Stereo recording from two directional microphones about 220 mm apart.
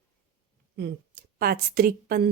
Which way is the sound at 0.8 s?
45° right (ahead or behind).